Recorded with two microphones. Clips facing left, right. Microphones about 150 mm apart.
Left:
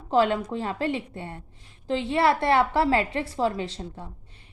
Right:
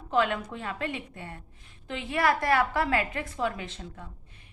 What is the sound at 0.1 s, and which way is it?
A woman's voice, 35° left (ahead or behind).